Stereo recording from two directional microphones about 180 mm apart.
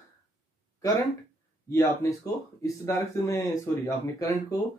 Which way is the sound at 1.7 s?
15° left (ahead or behind).